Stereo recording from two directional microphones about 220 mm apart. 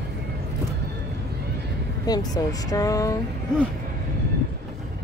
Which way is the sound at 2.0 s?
15° left (ahead or behind).